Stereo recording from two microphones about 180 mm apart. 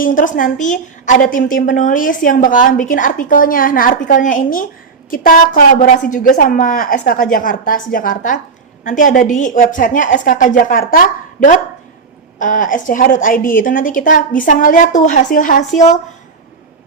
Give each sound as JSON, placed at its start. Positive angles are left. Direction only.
{"t": 0.0, "sound": "a woman's voice", "side_deg": 45}